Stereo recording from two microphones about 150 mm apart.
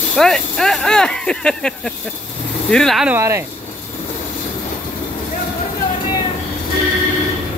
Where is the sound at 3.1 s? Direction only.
20° right (ahead or behind).